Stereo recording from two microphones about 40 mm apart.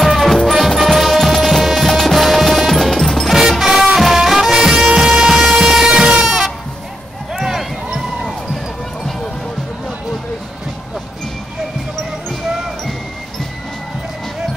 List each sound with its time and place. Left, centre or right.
0.0 s music: centre
3.3 s music: centre
6.2 s music: centre
7.3 s run: centre